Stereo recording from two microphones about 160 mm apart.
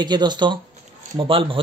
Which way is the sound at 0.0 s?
25° right (ahead or behind).